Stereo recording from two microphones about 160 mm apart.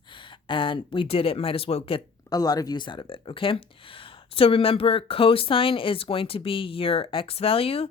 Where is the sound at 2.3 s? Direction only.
25° left (ahead or behind).